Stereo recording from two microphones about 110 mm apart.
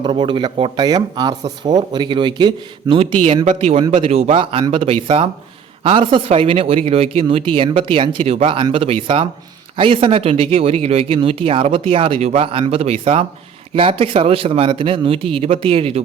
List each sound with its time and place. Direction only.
0.0 s speech: 45° right (ahead or behind)
2.9 s speech: 65° right (ahead or behind)